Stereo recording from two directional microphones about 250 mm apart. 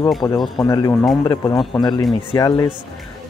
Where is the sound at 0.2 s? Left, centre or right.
Centre.